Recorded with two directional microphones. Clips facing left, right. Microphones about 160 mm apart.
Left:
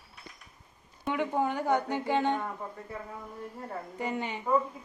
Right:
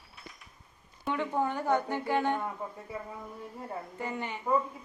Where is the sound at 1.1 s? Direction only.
15° left (ahead or behind).